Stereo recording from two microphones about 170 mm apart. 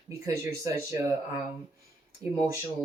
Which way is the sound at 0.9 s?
15° right (ahead or behind).